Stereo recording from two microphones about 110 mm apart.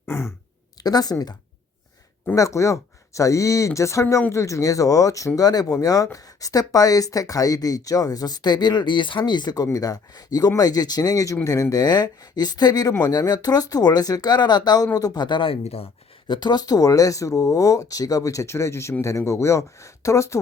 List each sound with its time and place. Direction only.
0.0 s throat clearing: 20° left (ahead or behind)
0.8 s speech: 35° left (ahead or behind)
2.3 s speech: 30° left (ahead or behind); by 15.5 s 45° left (ahead or behind)
15.6 s speech: 65° left (ahead or behind)
16.2 s speech: 45° left (ahead or behind); by 20.4 s 25° left (ahead or behind)